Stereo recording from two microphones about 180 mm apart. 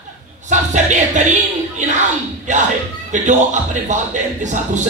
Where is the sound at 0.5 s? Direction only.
40° right (ahead or behind).